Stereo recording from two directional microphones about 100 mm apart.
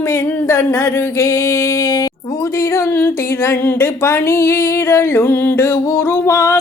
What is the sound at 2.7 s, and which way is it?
Speech, 25° left (ahead or behind).